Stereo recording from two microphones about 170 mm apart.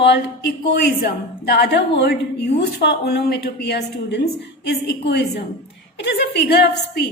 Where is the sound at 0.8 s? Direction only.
75° left (ahead or behind).